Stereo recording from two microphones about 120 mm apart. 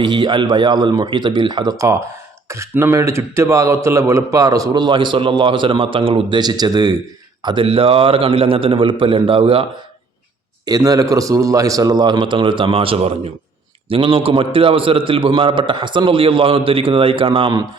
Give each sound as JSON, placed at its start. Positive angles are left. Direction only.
{"t": 0.0, "sound": "a man's voice", "side_deg": -40}
{"t": 7.4, "sound": "a man's voice", "side_deg": -45}
{"t": 10.7, "sound": "a man's voice", "side_deg": -30}